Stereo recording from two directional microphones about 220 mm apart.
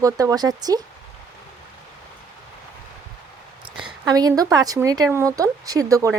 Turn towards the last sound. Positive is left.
turn(degrees=-15)  # may be behind; listen again after turning